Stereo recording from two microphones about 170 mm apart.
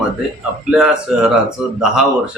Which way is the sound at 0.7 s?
5° right (ahead or behind).